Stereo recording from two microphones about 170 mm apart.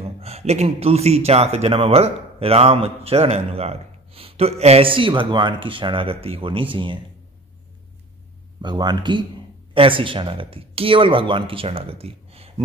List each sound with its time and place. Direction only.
0.0 s a man's voice: 35° right (ahead or behind)
8.5 s a man's voice: 25° right (ahead or behind)